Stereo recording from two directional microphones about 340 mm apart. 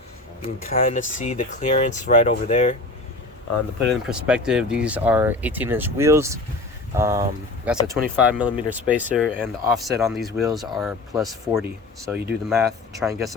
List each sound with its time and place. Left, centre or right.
0.4 s speech: left
4.1 s speech: centre